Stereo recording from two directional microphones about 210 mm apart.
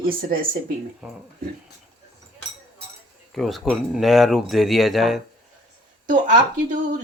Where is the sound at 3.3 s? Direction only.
Centre (ahead or behind).